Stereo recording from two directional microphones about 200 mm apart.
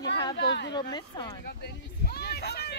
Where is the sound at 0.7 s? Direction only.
20° left (ahead or behind).